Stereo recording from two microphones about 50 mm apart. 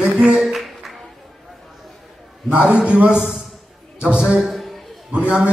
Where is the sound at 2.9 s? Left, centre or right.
Right.